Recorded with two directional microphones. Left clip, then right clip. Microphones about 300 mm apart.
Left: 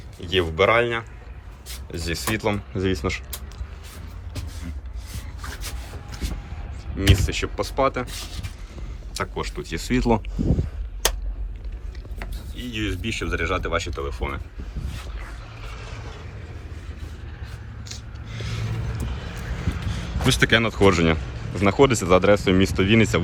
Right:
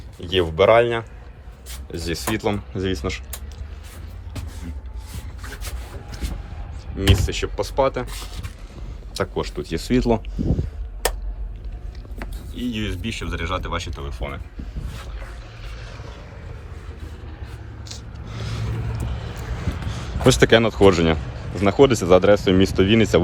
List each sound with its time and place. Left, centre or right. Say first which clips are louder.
0.2 s speech: right 2 dB; centre
7.3 s speech: right 1 dB; centre
9.1 s speech: right 3 dB; centre
12.5 s speech: right 1 dB; centre
17.8 s vehicle: right 1 dB; centre
19.6 s speech: right 1 dB; right